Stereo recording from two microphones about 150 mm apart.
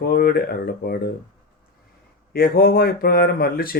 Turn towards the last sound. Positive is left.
turn(degrees=80)